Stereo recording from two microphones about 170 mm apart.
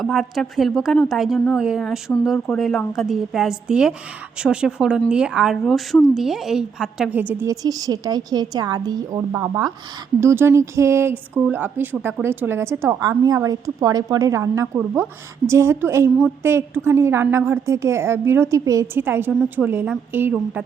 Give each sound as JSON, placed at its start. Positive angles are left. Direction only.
{"t": 0.0, "sound": "a woman's voice", "side_deg": 0}